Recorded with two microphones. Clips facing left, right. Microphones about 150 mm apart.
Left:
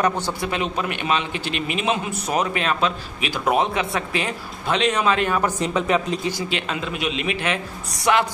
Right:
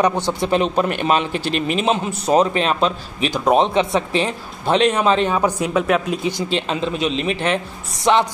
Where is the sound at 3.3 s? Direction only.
20° right (ahead or behind).